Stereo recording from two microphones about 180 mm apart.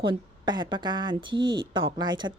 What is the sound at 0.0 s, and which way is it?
Speech, 25° right (ahead or behind).